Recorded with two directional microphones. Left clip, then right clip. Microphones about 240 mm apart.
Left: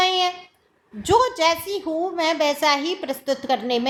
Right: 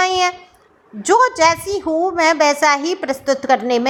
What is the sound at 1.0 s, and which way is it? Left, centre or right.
A woman's voice, right.